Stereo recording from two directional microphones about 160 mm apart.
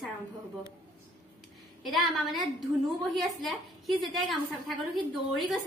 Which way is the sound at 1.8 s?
Centre (ahead or behind).